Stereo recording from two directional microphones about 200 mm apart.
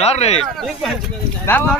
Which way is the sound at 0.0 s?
30° left (ahead or behind).